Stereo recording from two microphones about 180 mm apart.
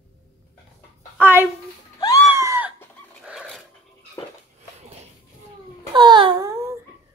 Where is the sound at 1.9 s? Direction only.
20° left (ahead or behind).